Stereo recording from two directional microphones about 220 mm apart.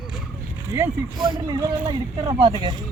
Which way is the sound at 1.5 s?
15° right (ahead or behind).